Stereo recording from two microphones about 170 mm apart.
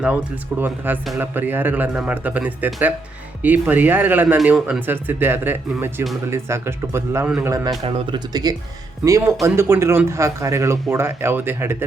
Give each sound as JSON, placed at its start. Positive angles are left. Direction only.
{"t": 1.1, "sound": "speech", "side_deg": -10}
{"t": 7.9, "sound": "speech", "side_deg": -30}